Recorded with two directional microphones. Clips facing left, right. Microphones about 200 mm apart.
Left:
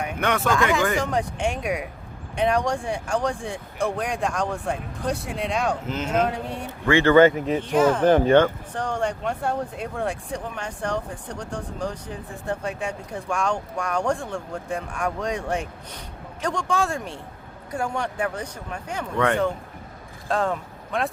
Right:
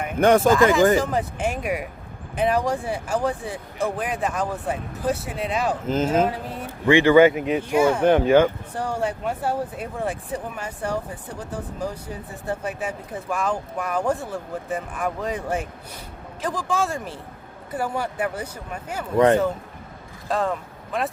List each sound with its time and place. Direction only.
0.2 s a man's voice: 35° right (ahead or behind)
0.5 s speech: centre (ahead or behind)
6.8 s speech: 15° right (ahead or behind)
19.1 s a man's voice: 35° right (ahead or behind)
20.2 s speech: centre (ahead or behind)